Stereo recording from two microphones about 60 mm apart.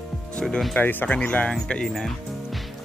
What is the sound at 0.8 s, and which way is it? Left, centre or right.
Speech, left.